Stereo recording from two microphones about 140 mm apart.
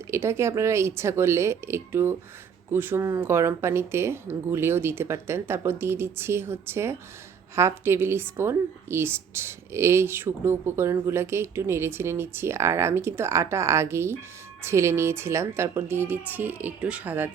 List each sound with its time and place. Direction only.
0.1 s a woman's voice: 20° right (ahead or behind)